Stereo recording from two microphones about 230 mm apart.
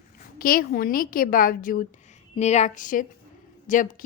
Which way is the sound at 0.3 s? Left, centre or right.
Left.